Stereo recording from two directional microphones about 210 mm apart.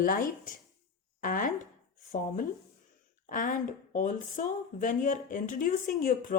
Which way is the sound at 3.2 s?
40° left (ahead or behind).